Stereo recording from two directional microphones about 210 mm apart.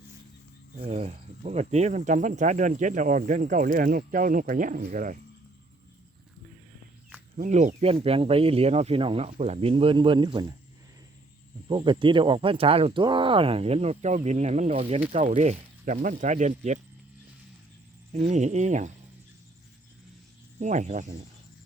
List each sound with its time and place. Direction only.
0.8 s speech: 30° right (ahead or behind)
7.3 s speech: 35° right (ahead or behind)
11.7 s speech: 20° right (ahead or behind)
18.1 s speech: 35° right (ahead or behind)
20.6 s speech: 35° right (ahead or behind)